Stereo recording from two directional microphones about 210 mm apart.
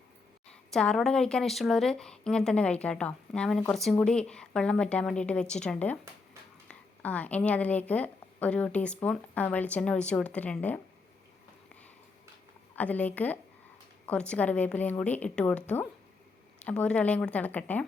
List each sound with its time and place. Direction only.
0.7 s a woman's voice: 5° left (ahead or behind)
12.7 s a woman's voice: 5° left (ahead or behind)